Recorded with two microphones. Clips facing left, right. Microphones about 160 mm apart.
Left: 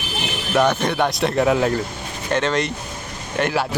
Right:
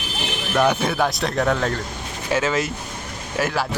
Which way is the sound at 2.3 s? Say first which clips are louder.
Left 1 dB; 5° right (ahead or behind).